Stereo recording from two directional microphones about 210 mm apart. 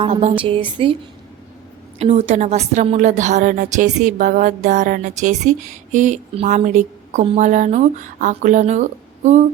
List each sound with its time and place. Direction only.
0.0 s a woman's voice: 30° right (ahead or behind)
2.0 s a woman's voice: 30° right (ahead or behind)